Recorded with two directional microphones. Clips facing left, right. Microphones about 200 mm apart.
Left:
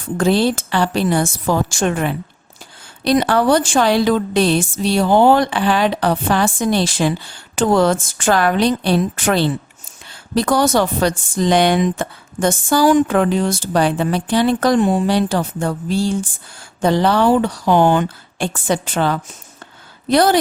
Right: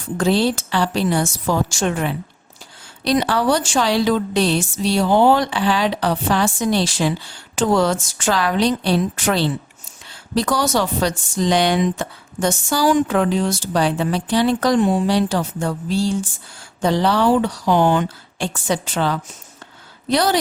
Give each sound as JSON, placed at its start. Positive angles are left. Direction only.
{"t": 0.2, "sound": "a woman's voice", "side_deg": 55}